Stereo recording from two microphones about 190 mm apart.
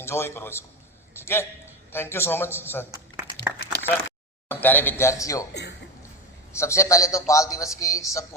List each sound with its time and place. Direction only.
0.0 s a man's voice: 15° left (ahead or behind)
2.9 s a sound: 10° right (ahead or behind)
4.4 s a man's voice: 10° left (ahead or behind)
6.6 s a man's voice: 15° left (ahead or behind)